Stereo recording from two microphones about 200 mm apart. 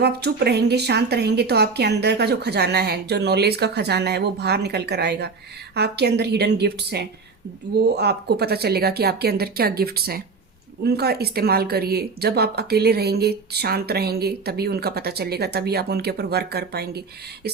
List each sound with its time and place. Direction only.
0.0 s speech: 55° right (ahead or behind)